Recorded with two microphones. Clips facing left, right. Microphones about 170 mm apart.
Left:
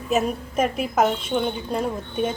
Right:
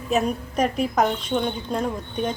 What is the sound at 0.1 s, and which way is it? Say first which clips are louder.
A woman's voice: even; 5° left (ahead or behind).